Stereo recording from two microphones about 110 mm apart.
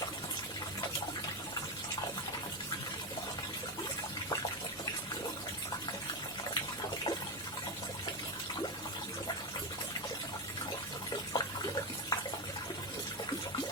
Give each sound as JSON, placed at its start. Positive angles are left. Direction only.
{"t": 11.3, "sound": "water", "side_deg": 40}